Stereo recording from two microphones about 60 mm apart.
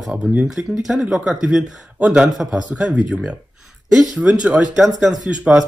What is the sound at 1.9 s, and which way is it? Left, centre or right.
Speech, right.